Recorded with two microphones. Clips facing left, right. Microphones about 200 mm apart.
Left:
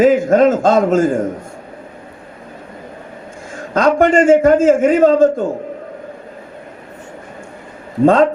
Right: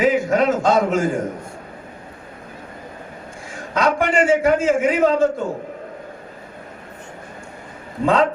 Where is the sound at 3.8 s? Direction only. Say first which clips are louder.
Left 6 dB; 45° left (ahead or behind).